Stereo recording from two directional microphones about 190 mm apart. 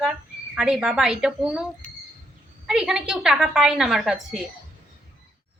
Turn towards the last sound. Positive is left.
turn(degrees=0)  # may be behind; listen again after turning